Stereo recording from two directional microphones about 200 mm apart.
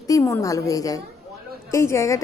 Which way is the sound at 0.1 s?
15° left (ahead or behind).